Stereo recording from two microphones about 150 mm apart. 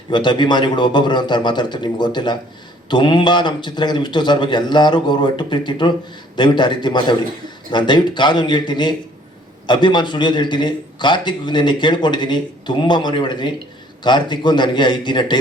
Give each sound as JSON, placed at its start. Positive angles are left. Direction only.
{"t": 0.1, "sound": "a man's voice", "side_deg": 30}